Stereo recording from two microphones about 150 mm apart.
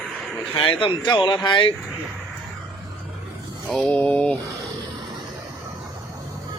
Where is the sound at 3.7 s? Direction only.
10° left (ahead or behind).